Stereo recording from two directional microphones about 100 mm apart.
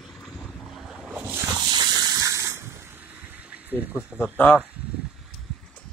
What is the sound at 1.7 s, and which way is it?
Water, 45° right (ahead or behind).